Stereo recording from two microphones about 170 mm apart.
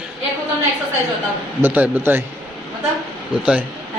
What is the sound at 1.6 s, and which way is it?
Speech, 10° right (ahead or behind).